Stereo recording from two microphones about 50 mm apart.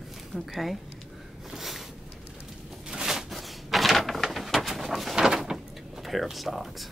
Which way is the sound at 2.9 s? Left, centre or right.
Centre.